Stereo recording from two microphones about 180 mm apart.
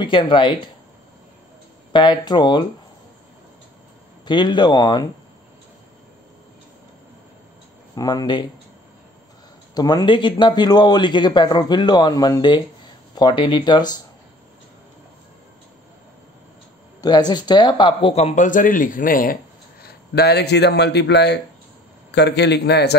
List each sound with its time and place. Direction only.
0.0 s speech: 25° left (ahead or behind)
1.9 s speech: 25° left (ahead or behind)
4.3 s speech: 25° left (ahead or behind)
7.9 s speech: 20° left (ahead or behind)
9.8 s speech: 20° left (ahead or behind)
17.0 s speech: 25° left (ahead or behind); by 19.3 s 50° left (ahead or behind)
19.8 s a man's voice: 60° left (ahead or behind)